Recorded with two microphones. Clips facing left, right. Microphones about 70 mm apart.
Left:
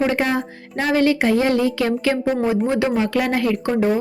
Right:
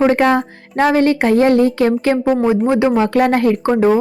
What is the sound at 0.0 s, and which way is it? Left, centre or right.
Speech, right.